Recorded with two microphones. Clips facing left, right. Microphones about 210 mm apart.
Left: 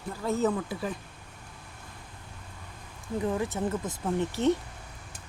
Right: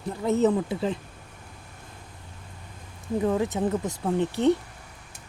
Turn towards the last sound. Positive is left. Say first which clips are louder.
# right 4 dB
turn(degrees=-15)  # may be behind; listen again after turning